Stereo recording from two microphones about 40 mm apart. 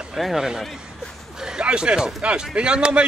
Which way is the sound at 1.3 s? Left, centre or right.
Centre.